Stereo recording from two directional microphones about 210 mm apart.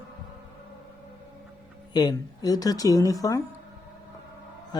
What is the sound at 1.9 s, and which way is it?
Speech, 20° left (ahead or behind).